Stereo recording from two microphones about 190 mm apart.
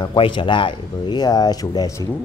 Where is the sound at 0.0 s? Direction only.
25° left (ahead or behind).